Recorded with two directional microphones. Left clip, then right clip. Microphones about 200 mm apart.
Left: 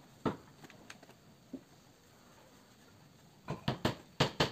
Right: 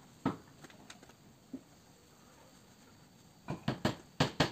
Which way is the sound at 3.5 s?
40° left (ahead or behind).